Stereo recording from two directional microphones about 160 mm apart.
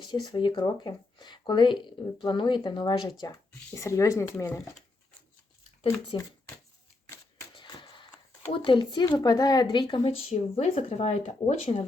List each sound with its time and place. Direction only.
0.0 s speech: 30° left (ahead or behind)
6.1 s speech: 30° left (ahead or behind)
7.5 s a sound: 30° left (ahead or behind)
8.5 s speech: 30° left (ahead or behind)